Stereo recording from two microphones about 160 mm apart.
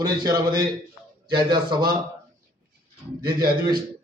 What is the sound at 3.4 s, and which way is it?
Speech, 70° right (ahead or behind).